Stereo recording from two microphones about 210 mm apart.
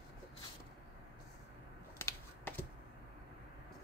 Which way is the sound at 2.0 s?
10° left (ahead or behind).